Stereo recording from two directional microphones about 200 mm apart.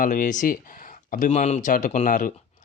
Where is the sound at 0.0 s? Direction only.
40° left (ahead or behind).